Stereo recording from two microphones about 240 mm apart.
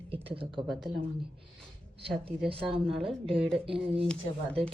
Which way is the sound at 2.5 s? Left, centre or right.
Right.